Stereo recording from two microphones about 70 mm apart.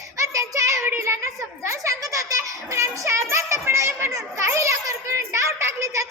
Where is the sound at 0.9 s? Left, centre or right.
Right.